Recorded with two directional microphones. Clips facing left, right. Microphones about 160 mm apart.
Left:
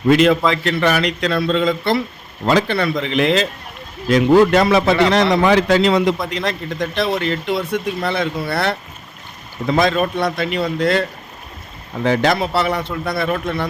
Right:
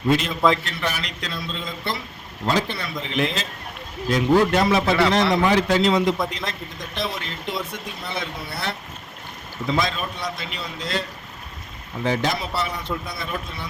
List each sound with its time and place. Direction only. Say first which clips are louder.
0.1 s a man's voice: left 6 dB; 80° left
9.6 s a man's voice: left 8 dB; 60° left (ahead or behind)
12.0 s speech: left 7 dB; 70° left (ahead or behind)